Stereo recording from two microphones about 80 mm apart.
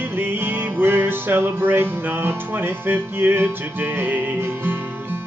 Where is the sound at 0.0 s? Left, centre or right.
Right.